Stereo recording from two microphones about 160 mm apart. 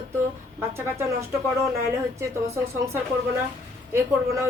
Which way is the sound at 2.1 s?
15° right (ahead or behind).